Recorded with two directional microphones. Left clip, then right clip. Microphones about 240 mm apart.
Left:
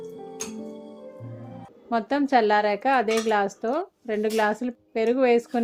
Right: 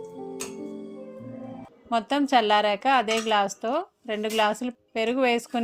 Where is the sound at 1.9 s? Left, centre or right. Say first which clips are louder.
Even; right.